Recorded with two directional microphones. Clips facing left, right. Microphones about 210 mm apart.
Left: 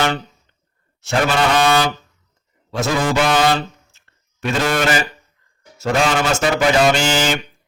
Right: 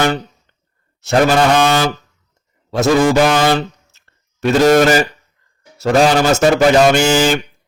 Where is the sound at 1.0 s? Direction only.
40° right (ahead or behind).